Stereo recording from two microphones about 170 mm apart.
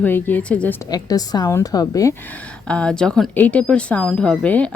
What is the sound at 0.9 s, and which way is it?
A woman's voice, 20° left (ahead or behind).